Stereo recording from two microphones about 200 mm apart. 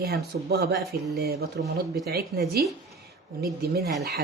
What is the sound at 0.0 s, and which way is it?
Speech, 55° right (ahead or behind).